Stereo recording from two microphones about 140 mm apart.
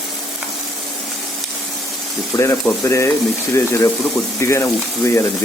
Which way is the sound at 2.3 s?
20° left (ahead or behind).